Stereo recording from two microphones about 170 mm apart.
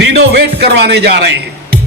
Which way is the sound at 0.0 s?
80° right.